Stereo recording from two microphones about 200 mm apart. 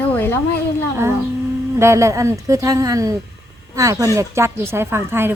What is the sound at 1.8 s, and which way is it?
Speech, 15° right (ahead or behind).